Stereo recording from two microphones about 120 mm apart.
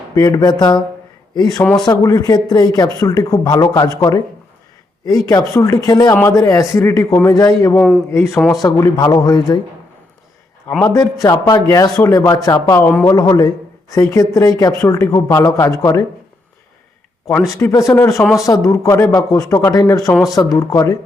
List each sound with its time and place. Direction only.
0.1 s speech: 35° left (ahead or behind)
1.8 s speech: 30° left (ahead or behind)
5.0 s speech: 30° left (ahead or behind)
7.8 s a man's voice: 5° left (ahead or behind)
8.1 s speech: 20° left (ahead or behind)
8.6 s speech: 30° left (ahead or behind)
10.7 s a man's voice: 5° left (ahead or behind)
10.9 s speech: 30° left (ahead or behind)
12.8 s a man's voice: 10° left (ahead or behind)
13.1 s speech: 35° left (ahead or behind)
17.6 s speech: 25° left (ahead or behind)